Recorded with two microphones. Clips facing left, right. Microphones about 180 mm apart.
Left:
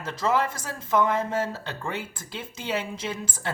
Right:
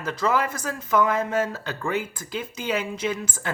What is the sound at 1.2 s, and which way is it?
Speech, 90° right.